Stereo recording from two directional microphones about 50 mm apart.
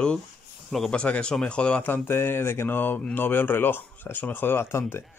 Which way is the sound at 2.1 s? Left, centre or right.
Left.